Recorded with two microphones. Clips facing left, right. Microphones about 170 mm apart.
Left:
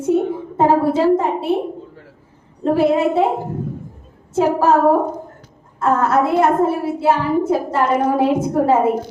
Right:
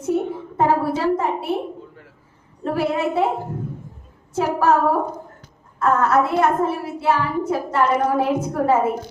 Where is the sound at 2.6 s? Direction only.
30° left (ahead or behind).